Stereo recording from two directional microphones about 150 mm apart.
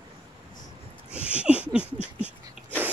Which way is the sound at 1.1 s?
10° right (ahead or behind).